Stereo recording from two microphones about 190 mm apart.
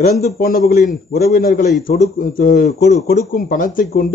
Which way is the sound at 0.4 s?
50° left (ahead or behind).